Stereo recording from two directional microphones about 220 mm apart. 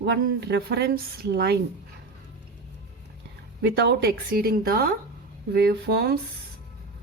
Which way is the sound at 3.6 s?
50° right (ahead or behind).